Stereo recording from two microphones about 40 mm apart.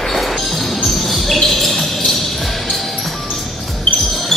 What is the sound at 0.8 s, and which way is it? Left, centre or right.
Basketball bounce, centre.